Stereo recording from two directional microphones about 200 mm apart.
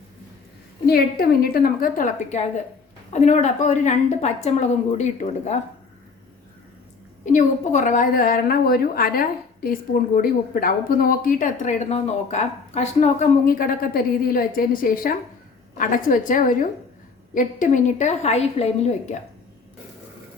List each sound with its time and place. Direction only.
0.9 s a woman's voice: 50° left (ahead or behind)
7.3 s a woman's voice: 35° left (ahead or behind)